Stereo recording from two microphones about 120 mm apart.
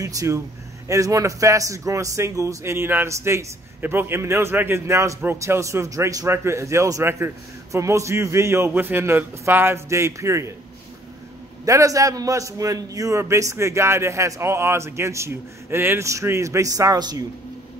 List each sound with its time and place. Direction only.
0.0 s a man's voice: 30° right (ahead or behind)
11.6 s a man's voice: 30° right (ahead or behind)